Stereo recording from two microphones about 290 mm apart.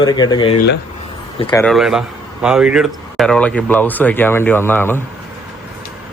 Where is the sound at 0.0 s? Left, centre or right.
Centre.